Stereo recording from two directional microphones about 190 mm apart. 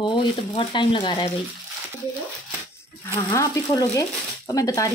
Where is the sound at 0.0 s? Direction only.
25° left (ahead or behind).